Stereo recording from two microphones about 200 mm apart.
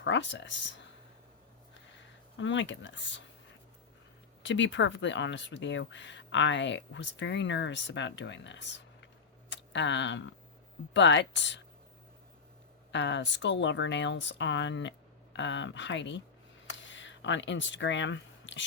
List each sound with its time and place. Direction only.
0.0 s speech: 65° left (ahead or behind)
2.4 s speech: 65° left (ahead or behind)
4.4 s speech: 65° left (ahead or behind)
12.9 s speech: 65° left (ahead or behind)
16.6 s a sound: 65° left (ahead or behind)